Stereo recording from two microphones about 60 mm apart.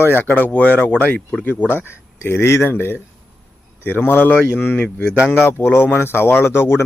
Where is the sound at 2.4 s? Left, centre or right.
Left.